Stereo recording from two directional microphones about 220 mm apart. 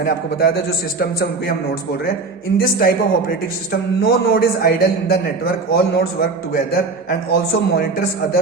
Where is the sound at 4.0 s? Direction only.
45° left (ahead or behind).